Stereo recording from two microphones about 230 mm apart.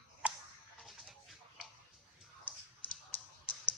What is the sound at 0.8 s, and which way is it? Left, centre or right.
Music, centre.